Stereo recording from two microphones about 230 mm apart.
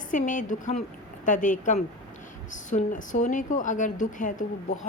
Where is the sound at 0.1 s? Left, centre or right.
Left.